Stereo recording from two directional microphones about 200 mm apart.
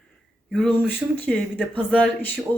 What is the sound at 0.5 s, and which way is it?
Speech, 5° left (ahead or behind).